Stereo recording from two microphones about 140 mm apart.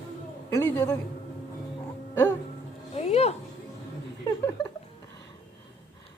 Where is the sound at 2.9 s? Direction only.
50° left (ahead or behind).